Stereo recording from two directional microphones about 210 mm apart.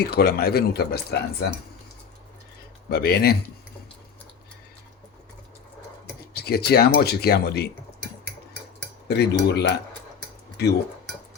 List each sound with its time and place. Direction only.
0.0 s speech: 50° left (ahead or behind)
2.9 s speech: 50° left (ahead or behind)
6.3 s speech: 50° left (ahead or behind)
9.0 s speech: 50° left (ahead or behind)